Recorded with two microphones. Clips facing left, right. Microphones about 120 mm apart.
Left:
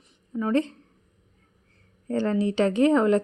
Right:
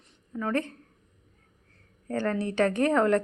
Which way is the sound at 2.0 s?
15° left (ahead or behind).